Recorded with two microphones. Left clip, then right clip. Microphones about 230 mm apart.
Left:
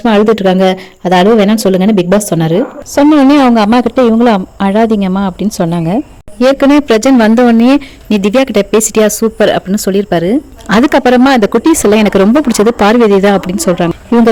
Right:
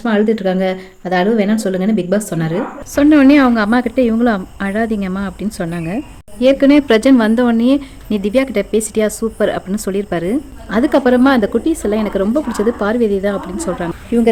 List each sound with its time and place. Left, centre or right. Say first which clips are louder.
0.0 s speech: left 7 dB; left